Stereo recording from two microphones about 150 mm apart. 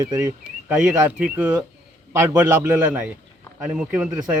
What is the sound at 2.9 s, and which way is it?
Speech, 5° right (ahead or behind).